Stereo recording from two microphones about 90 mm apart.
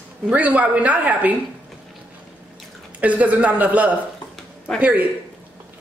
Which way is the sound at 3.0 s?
15° right (ahead or behind).